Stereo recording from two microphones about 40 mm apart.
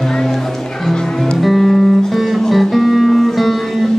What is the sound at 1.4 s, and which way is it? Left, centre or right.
Music, centre.